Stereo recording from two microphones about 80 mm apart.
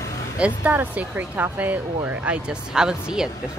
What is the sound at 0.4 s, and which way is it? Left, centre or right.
Speech, centre.